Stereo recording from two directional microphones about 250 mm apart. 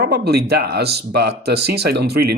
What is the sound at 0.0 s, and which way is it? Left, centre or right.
Speech, right.